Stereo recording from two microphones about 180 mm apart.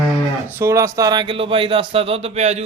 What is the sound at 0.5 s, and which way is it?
Speech, 15° right (ahead or behind).